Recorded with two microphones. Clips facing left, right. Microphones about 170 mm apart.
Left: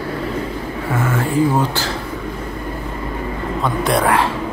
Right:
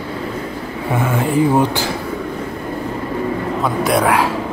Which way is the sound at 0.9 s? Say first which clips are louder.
Right 2 dB; 15° right (ahead or behind).